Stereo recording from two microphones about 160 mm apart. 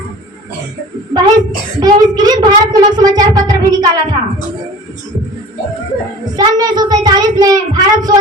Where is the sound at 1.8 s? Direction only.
25° right (ahead or behind).